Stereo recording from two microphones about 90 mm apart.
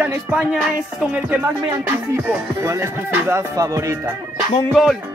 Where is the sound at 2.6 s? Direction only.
30° right (ahead or behind).